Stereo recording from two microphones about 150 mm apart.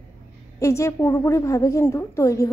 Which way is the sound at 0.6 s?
20° left (ahead or behind).